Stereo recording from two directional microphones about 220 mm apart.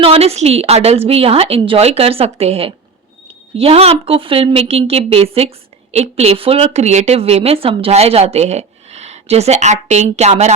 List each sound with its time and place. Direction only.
0.0 s speech: 25° right (ahead or behind)